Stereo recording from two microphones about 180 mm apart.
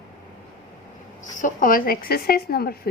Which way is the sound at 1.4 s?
45° left (ahead or behind).